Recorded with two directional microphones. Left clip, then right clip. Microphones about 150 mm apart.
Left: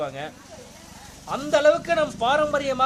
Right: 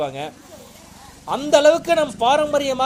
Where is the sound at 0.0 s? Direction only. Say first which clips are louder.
Right 5 dB; 25° right (ahead or behind).